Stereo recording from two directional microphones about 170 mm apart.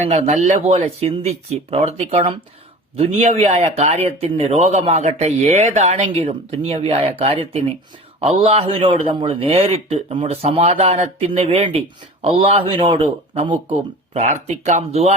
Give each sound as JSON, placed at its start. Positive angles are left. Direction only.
{"t": 0.0, "sound": "speech", "side_deg": -40}